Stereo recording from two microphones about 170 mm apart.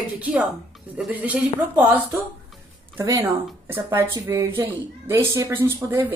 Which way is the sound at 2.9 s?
20° right (ahead or behind).